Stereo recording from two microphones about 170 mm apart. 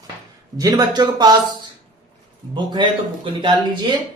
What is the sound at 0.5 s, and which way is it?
Speech, 20° right (ahead or behind).